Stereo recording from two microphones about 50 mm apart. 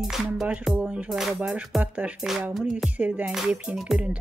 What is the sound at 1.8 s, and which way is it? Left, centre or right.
Music, right.